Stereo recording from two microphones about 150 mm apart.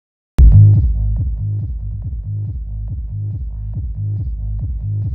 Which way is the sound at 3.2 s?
20° left (ahead or behind).